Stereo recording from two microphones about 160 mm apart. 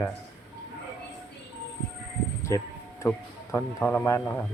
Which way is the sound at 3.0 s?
20° left (ahead or behind).